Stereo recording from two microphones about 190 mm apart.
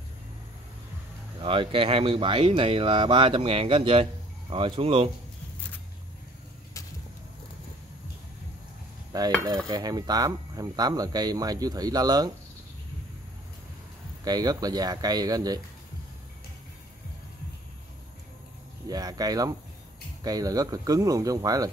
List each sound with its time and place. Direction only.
1.4 s speech: 25° right (ahead or behind)
9.1 s speech: 20° right (ahead or behind)
14.2 s speech: 20° right (ahead or behind)
18.9 s speech: 20° right (ahead or behind)